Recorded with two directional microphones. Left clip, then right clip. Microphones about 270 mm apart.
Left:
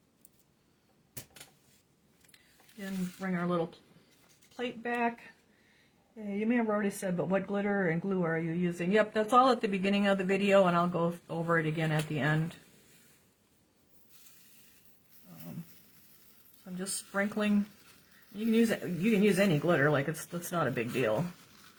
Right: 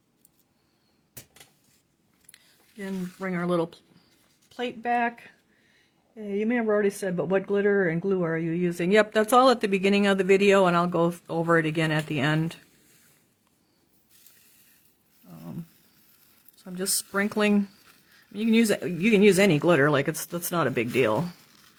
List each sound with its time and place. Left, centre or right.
2.3 s speech: right
15.2 s a sound: right
16.7 s speech: right
19.0 s speech: right